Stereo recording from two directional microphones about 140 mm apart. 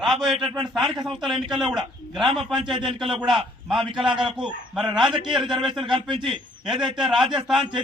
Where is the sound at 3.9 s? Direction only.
35° right (ahead or behind).